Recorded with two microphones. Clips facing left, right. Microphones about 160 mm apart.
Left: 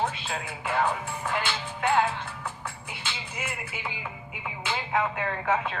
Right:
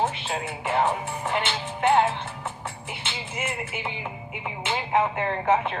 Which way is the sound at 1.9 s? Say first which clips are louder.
Right 4 dB; 20° right (ahead or behind).